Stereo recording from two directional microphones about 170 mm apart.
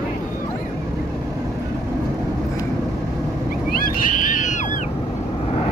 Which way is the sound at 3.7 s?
55° left (ahead or behind).